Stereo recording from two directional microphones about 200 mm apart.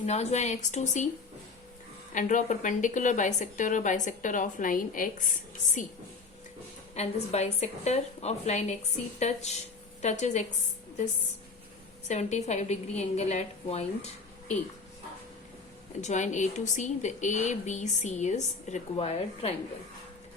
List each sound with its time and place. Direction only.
0.0 s speech: 35° left (ahead or behind)
2.1 s speech: 40° left (ahead or behind)
6.9 s speech: 30° left (ahead or behind)
12.0 s speech: 35° left (ahead or behind)
16.0 s speech: 35° left (ahead or behind)